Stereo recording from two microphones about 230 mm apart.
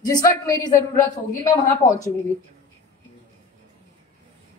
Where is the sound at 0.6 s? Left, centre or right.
Left.